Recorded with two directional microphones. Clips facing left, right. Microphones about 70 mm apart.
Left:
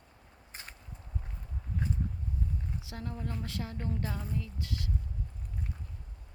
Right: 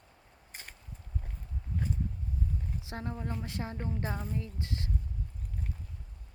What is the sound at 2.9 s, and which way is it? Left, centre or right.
Speech, right.